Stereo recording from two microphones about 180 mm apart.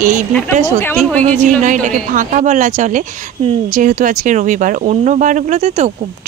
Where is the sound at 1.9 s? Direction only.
45° right (ahead or behind).